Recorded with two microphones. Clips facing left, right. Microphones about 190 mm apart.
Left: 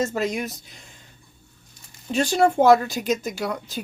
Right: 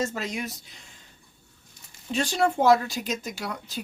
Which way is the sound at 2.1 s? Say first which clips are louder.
Left 5 dB; 50° left (ahead or behind).